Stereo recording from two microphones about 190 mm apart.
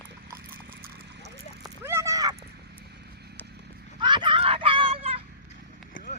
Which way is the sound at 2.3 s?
60° right (ahead or behind).